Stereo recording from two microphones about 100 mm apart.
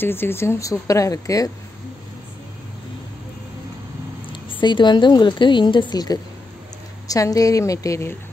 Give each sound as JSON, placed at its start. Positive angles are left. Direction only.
{"t": 0.0, "sound": "speech", "side_deg": 20}
{"t": 4.3, "sound": "a woman's voice", "side_deg": 55}